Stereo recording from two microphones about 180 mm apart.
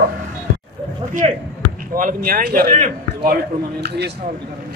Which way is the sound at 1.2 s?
35° right (ahead or behind).